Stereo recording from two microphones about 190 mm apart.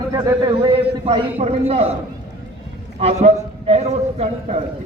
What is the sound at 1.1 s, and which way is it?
Speech, 35° right (ahead or behind).